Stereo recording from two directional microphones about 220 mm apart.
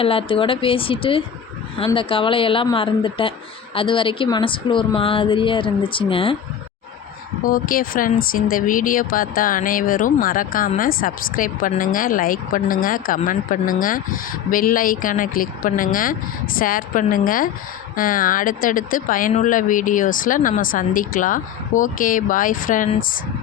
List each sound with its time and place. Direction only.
0.0 s speech: 25° left (ahead or behind)
7.4 s speech: 40° left (ahead or behind)